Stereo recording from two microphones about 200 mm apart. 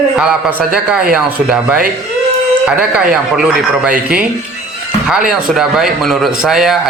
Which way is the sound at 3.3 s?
5° right (ahead or behind).